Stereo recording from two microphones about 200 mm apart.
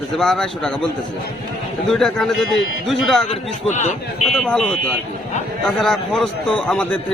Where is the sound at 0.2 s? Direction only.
Centre (ahead or behind).